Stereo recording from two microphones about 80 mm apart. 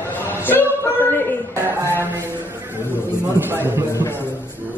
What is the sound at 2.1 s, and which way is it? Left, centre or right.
A man's voice, right.